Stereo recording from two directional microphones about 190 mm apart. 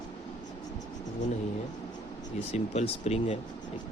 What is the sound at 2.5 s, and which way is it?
Speech, 35° left (ahead or behind).